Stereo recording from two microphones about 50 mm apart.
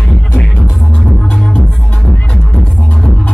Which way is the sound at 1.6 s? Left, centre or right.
Centre.